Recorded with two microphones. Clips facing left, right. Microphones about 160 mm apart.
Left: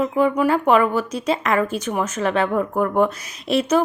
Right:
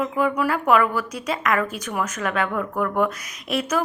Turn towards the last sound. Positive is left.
turn(degrees=30)  # may be behind; listen again after turning